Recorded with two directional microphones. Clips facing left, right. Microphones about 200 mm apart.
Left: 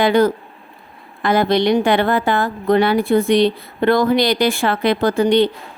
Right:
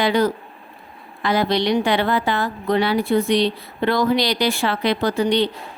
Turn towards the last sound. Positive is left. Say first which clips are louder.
# left 4 dB
turn(degrees=50)  # may be behind; listen again after turning